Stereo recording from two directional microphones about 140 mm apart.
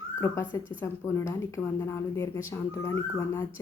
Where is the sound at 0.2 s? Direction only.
20° left (ahead or behind).